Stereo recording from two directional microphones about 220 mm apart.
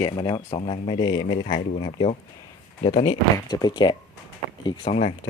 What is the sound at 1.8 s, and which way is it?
Speech, 25° left (ahead or behind).